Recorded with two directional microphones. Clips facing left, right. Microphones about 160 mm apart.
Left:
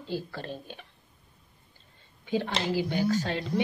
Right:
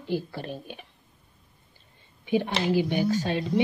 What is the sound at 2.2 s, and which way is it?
Speech, 15° right (ahead or behind).